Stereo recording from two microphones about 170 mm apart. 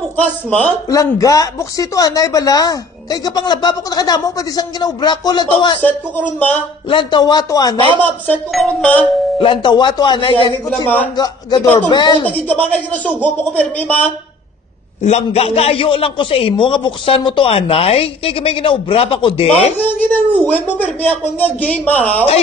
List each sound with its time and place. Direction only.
0.2 s speech: 10° left (ahead or behind)
0.8 s speech: 20° left (ahead or behind)
5.8 s speech: 10° left (ahead or behind)
6.9 s speech: 25° left (ahead or behind)
8.0 s speech: 5° left (ahead or behind)
9.4 s speech: 30° left (ahead or behind)
11.6 s speech: 10° left (ahead or behind)
11.9 s speech: 25° left (ahead or behind)
12.3 s speech: 10° left (ahead or behind)
15.0 s a man's voice: 40° left (ahead or behind)
19.8 s speech: 10° left (ahead or behind)